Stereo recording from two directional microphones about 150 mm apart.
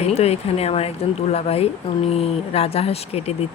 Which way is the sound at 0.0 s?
45° left (ahead or behind).